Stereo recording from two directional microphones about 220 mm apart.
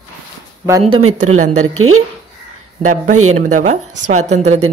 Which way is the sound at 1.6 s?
75° right (ahead or behind).